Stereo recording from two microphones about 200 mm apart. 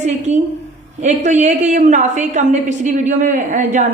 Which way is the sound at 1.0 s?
35° right (ahead or behind).